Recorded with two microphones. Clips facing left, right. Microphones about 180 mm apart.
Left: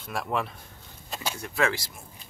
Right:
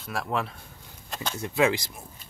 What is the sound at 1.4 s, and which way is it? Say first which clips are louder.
Speech: right 4 dB; 20° right (ahead or behind).